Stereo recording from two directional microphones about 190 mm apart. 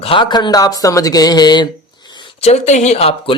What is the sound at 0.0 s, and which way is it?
Speech, 25° left (ahead or behind).